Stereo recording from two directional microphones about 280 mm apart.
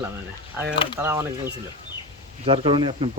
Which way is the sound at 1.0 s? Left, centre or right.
Centre.